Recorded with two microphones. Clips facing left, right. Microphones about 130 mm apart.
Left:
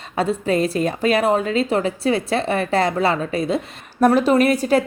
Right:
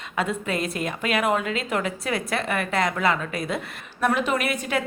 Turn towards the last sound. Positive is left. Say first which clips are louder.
# left 9 dB
turn(degrees=35)  # may be behind; listen again after turning